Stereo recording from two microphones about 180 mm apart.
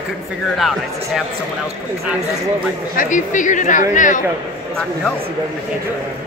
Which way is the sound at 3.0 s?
45° left (ahead or behind).